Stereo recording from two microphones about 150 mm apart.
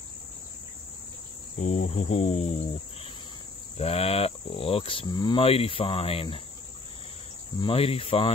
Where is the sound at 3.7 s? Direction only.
40° left (ahead or behind).